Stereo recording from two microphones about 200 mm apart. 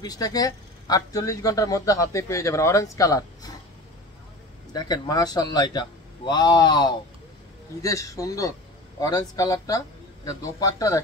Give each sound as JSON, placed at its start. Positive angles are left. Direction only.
{"t": 0.0, "sound": "a man's voice", "side_deg": 20}
{"t": 4.7, "sound": "a man's voice", "side_deg": 20}